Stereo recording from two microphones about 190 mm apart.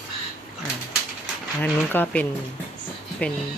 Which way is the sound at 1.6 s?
10° left (ahead or behind).